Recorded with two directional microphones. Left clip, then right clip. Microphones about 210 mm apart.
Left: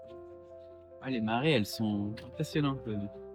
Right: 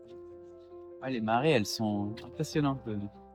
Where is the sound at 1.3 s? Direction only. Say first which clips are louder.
Right 3 dB; 20° right (ahead or behind).